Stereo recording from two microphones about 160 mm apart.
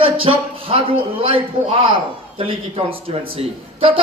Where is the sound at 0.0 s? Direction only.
35° right (ahead or behind).